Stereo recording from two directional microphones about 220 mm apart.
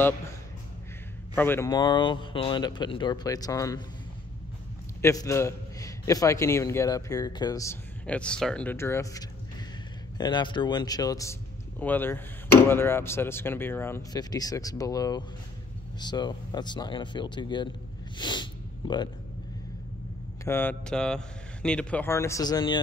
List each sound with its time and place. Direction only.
1.3 s speech: 10° left (ahead or behind)
5.0 s a man's voice: 15° left (ahead or behind)
18.1 s snort: 20° left (ahead or behind)
20.4 s a man's voice: 10° left (ahead or behind)